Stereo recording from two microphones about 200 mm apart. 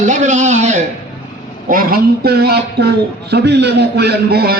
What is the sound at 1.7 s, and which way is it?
A man's voice, 45° right (ahead or behind).